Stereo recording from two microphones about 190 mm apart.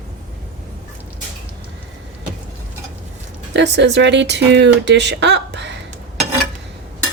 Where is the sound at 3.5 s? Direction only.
70° right (ahead or behind).